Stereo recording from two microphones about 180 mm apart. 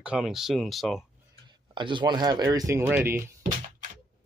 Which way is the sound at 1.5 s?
25° right (ahead or behind).